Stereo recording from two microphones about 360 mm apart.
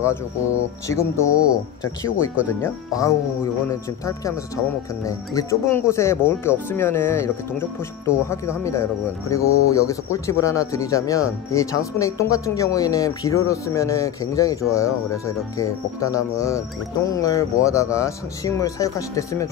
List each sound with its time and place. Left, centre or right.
0.8 s speech: centre
2.0 s speech: left
2.6 s speech: centre
5.0 s speech: centre
8.3 s speech: centre